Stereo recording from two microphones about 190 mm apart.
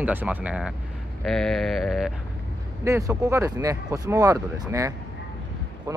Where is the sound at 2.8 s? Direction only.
15° right (ahead or behind).